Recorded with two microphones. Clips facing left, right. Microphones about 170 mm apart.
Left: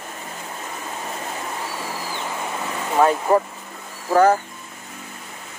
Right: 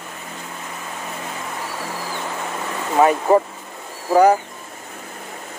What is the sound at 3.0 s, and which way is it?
Speech, 10° right (ahead or behind).